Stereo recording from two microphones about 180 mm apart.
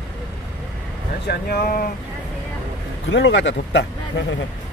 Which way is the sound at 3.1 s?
80° left.